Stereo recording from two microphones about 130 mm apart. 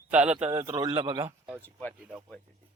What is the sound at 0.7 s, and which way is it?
Speech, 30° right (ahead or behind).